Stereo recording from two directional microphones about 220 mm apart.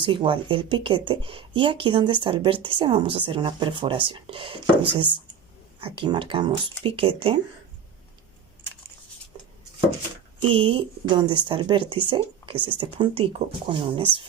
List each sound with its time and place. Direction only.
0.0 s speech: 20° right (ahead or behind)
10.5 s speech: 25° right (ahead or behind)